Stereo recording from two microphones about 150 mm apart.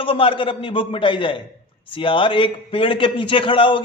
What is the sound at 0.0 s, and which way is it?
A man's voice, 35° left (ahead or behind).